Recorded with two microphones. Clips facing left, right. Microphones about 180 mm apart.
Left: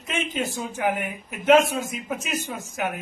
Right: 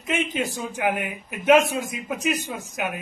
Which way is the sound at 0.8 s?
15° right (ahead or behind).